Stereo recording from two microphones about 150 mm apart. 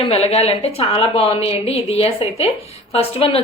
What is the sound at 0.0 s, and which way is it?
Speech, 40° left (ahead or behind).